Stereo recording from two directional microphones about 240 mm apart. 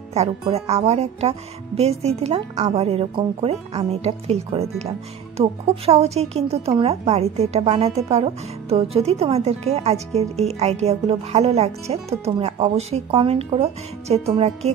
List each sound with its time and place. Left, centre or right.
0.1 s a woman's voice: right